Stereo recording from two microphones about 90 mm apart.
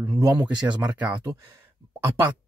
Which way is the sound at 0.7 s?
15° right (ahead or behind).